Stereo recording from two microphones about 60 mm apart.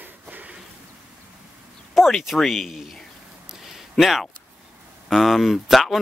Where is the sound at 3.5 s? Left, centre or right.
Centre.